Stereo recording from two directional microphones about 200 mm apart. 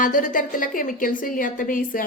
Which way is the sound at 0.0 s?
40° left (ahead or behind).